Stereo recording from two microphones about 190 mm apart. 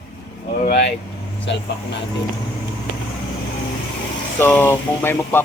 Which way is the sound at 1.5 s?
65° left (ahead or behind).